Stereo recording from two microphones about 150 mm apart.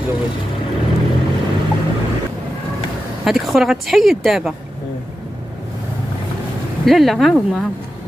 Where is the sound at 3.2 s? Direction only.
Centre (ahead or behind).